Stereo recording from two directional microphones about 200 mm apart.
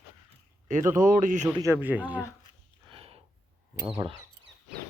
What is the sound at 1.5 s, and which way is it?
Speech, 15° right (ahead or behind).